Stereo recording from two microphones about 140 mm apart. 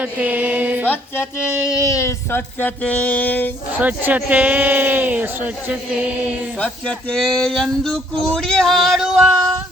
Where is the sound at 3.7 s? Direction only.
10° right (ahead or behind).